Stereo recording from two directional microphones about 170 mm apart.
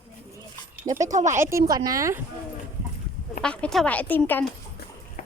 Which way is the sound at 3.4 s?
5° left (ahead or behind).